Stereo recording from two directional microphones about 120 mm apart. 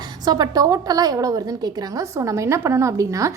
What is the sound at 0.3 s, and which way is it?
A woman's voice, 35° right (ahead or behind).